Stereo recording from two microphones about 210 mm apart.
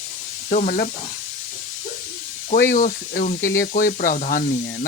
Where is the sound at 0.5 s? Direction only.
40° left (ahead or behind).